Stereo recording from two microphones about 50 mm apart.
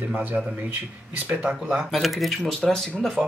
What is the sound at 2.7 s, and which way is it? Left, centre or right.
Speech, centre.